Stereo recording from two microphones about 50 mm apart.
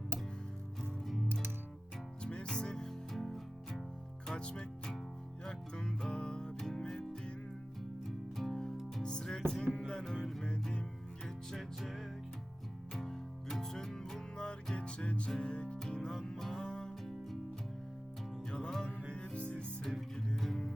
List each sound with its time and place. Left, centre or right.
0.8 s music: centre
2.2 s music: centre
4.4 s music: centre
8.4 s music: centre
10.4 s music: centre
11.3 s music: centre; by 15.8 s left
15.8 s music: centre
17.0 s music: centre
18.5 s music: centre
19.8 s music: centre